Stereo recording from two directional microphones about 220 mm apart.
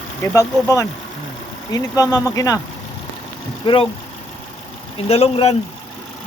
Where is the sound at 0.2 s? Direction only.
15° left (ahead or behind).